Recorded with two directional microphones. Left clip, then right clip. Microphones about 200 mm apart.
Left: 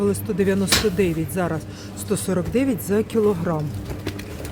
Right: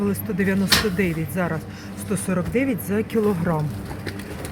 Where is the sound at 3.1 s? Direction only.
Centre (ahead or behind).